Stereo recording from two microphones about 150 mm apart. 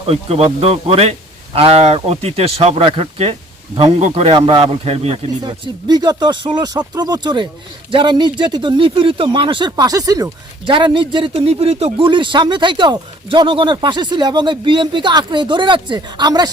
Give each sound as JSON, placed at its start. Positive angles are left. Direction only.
{"t": 0.0, "sound": "speech", "side_deg": -40}
{"t": 5.4, "sound": "speech", "side_deg": -30}